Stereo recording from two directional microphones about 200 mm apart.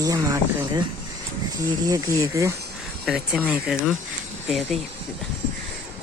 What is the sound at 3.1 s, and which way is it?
Speech, centre (ahead or behind).